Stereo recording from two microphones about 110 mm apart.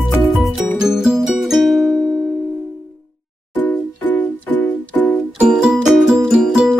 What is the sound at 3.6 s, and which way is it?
Music, 20° left (ahead or behind).